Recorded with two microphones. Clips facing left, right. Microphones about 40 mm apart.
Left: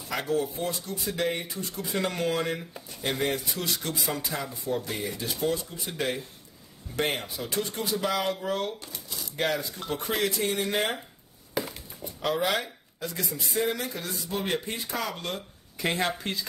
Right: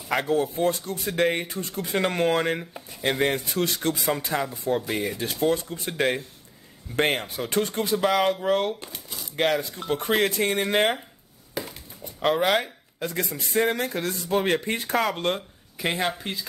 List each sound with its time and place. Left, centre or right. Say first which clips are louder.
0.2 s speech: right 4 dB; right
11.6 s crushing: left 1 dB; centre
12.0 s speech: right 5 dB; right
15.8 s speech: right 2 dB; centre